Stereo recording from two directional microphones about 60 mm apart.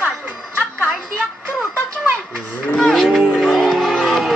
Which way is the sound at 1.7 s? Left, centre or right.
Right.